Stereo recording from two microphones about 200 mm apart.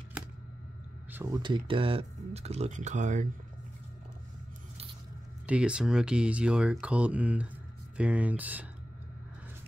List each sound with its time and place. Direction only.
1.1 s speech: 20° right (ahead or behind); by 3.3 s 35° right (ahead or behind)
5.5 s speech: 5° right (ahead or behind)